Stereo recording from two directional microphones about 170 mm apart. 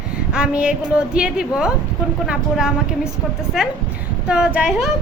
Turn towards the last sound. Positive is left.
turn(degrees=-5)  # may be behind; listen again after turning